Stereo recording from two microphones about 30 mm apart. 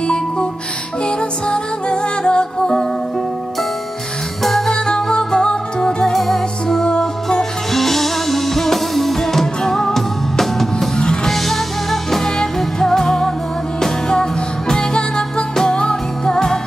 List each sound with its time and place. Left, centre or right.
1.0 s music: left
2.6 s music: centre
4.4 s music: centre; by 6.1 s left
6.1 s music: centre
6.8 s music: centre
7.7 s music: centre; by 16.0 s left
16.3 s music: centre